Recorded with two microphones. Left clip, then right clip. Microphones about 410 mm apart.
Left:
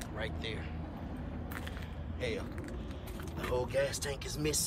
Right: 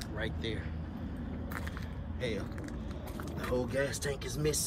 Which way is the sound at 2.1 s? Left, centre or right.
Centre.